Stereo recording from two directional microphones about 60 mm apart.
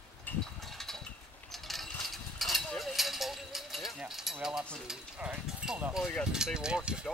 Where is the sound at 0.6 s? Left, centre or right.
Centre.